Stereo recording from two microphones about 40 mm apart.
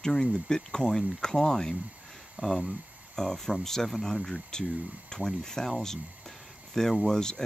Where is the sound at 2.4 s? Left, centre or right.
Right.